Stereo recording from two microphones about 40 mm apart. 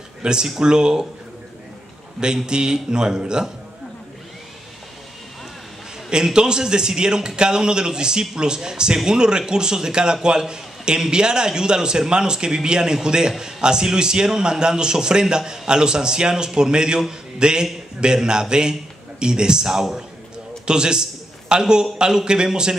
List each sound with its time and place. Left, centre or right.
0.2 s a man's voice: centre
2.1 s a man's voice: centre
6.0 s a man's voice: right